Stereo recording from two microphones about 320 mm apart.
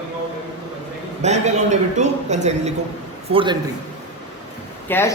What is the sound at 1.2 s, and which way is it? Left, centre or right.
A man's voice, right.